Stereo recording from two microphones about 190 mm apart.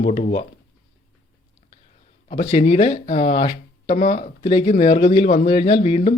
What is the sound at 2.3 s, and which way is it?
Speech, 30° left (ahead or behind).